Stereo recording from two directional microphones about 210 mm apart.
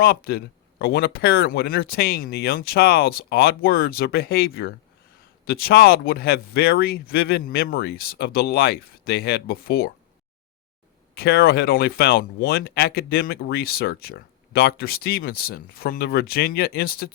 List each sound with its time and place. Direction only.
0.0 s speech: 45° left (ahead or behind)
11.1 s speech: 50° left (ahead or behind)